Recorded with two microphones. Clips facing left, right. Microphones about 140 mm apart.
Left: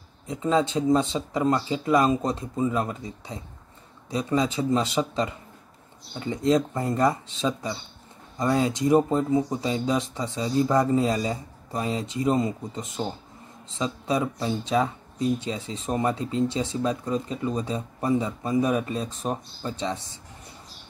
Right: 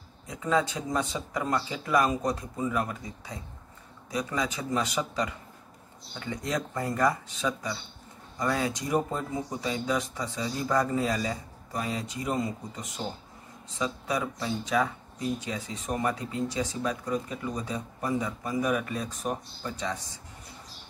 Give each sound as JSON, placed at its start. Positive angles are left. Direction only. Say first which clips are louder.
{"t": 0.3, "sound": "speech", "louder": "left 4 dB", "side_deg": 25}